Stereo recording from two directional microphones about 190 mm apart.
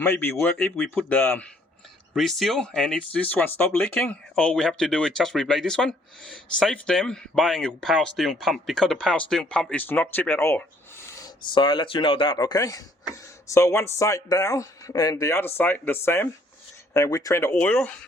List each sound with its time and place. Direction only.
0.0 s speech: 10° left (ahead or behind)
11.5 s speech: 25° left (ahead or behind); by 18.0 s 5° left (ahead or behind)